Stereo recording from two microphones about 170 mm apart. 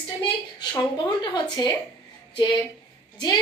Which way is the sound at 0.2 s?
25° left (ahead or behind).